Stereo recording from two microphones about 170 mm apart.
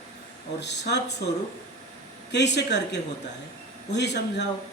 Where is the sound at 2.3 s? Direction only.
90° left.